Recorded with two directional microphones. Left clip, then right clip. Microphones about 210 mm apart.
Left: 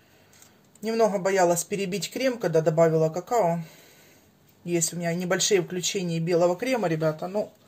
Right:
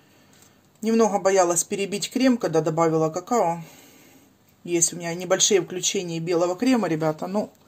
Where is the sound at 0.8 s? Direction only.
35° right (ahead or behind).